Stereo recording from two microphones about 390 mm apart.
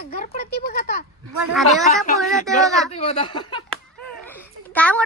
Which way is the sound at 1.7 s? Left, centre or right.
Centre.